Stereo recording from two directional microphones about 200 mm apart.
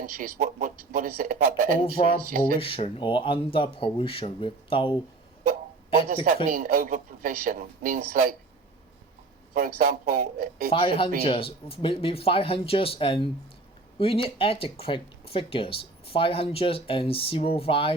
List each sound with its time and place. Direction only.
0.0 s speech: 45° right (ahead or behind)
2.6 s speech: 30° left (ahead or behind)
6.2 s speech: 45° right (ahead or behind)
9.6 s speech: 45° right (ahead or behind)
10.7 s speech: 25° left (ahead or behind)